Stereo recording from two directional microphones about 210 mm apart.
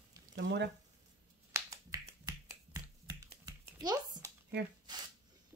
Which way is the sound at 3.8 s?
20° right (ahead or behind).